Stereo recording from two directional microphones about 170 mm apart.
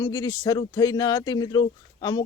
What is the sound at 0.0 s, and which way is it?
Speech, 20° left (ahead or behind).